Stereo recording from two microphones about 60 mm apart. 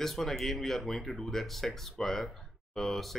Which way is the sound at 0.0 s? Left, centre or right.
Centre.